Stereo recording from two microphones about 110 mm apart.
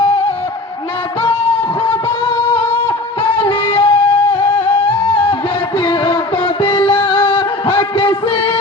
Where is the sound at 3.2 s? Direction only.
55° left (ahead or behind).